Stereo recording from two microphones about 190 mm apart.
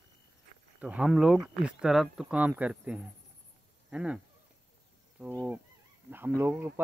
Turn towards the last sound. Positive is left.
turn(degrees=-10)  # may be behind; listen again after turning